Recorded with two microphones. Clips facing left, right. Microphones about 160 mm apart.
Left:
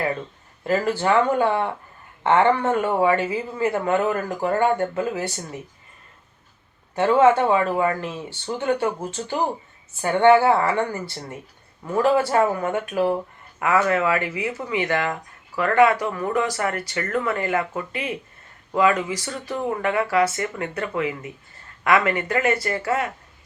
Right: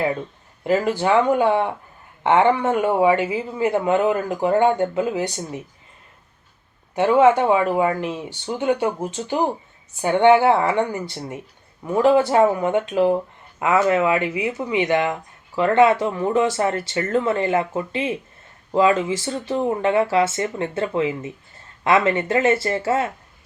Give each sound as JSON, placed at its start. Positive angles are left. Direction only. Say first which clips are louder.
{"t": 0.6, "sound": "speech", "louder": "right 2 dB", "side_deg": -15}
{"t": 6.9, "sound": "speech", "louder": "right 1 dB", "side_deg": -15}